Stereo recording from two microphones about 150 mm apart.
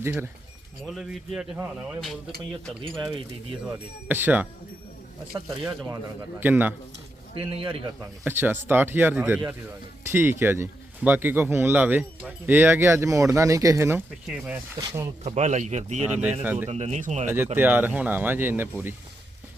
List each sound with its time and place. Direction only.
0.0 s speech: 15° right (ahead or behind)
0.9 s speech: centre (ahead or behind)
3.6 s speech: 10° right (ahead or behind)
7.3 s speech: 35° right (ahead or behind)
8.0 s speech: 15° right (ahead or behind)
14.8 s speech: 25° right (ahead or behind)
15.2 s speech: 50° right (ahead or behind)
16.4 s speech: 10° right (ahead or behind)
16.6 s speech: 45° right (ahead or behind)
17.2 s speech: 15° right (ahead or behind)